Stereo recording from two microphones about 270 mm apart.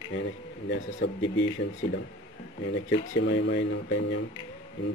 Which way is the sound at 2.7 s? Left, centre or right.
Left.